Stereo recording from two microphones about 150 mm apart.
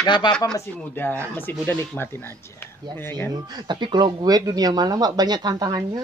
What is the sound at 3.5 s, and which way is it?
Speech, 30° right (ahead or behind).